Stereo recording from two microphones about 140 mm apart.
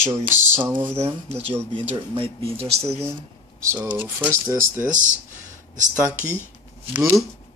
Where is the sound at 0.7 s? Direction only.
35° right (ahead or behind).